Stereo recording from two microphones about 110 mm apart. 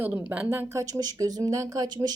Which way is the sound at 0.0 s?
15° right (ahead or behind).